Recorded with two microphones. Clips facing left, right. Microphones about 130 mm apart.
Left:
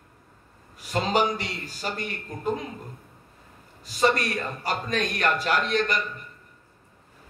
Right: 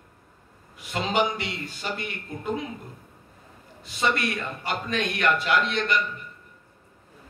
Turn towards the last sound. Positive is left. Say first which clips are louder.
# left 1 dB
turn(degrees=40)  # may be behind; listen again after turning